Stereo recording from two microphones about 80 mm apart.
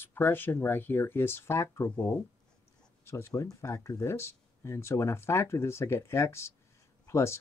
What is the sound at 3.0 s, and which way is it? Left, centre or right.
Speech, left.